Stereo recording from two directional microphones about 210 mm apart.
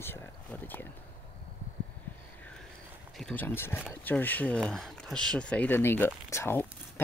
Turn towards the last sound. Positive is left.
turn(degrees=10)  # may be behind; listen again after turning